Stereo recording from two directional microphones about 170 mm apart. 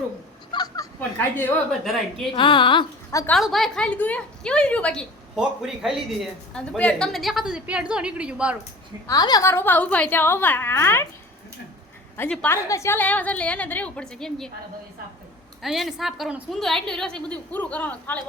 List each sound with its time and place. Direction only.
0.5 s a sound: 25° left (ahead or behind)
0.9 s a woman's voice: 10° left (ahead or behind)
2.3 s a woman's voice: 30° left (ahead or behind)
3.3 s a woman's voice: centre (ahead or behind)
9.0 s a woman's voice: 20° left (ahead or behind)
12.1 s a woman's voice: 10° left (ahead or behind)
15.6 s a woman's voice: centre (ahead or behind)